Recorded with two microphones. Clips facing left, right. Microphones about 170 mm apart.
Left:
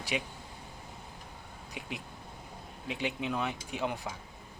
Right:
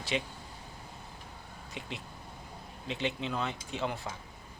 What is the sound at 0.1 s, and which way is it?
Speech, 10° left (ahead or behind).